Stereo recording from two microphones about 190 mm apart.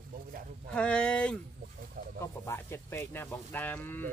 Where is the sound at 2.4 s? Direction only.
15° left (ahead or behind).